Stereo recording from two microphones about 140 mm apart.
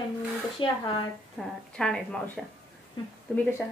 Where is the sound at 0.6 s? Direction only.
35° left (ahead or behind).